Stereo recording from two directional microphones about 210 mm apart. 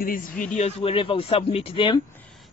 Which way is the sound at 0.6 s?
30° left (ahead or behind).